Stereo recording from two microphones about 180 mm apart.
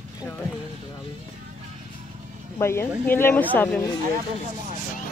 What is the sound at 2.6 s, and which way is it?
A woman's voice, 15° left (ahead or behind).